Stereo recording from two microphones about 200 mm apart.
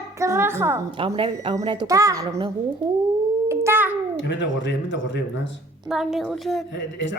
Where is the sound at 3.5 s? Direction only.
10° right (ahead or behind).